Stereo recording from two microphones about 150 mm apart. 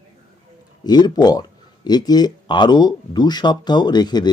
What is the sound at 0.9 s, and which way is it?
Speech, 30° left (ahead or behind).